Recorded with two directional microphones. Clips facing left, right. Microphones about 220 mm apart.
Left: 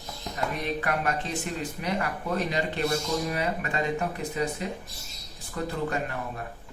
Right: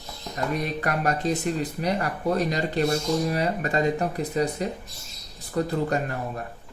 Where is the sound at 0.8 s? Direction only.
40° right (ahead or behind).